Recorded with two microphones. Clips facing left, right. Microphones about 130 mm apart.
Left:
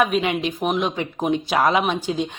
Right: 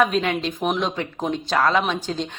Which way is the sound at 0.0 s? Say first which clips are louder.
Even; 10° left (ahead or behind).